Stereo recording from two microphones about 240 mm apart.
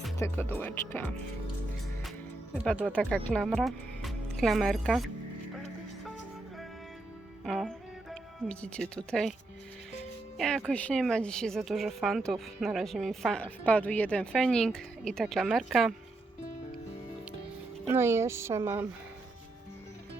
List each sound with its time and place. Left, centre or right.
0.2 s speech: centre
2.6 s speech: centre
7.4 s music: centre
10.3 s a woman's voice: centre
17.8 s speech: centre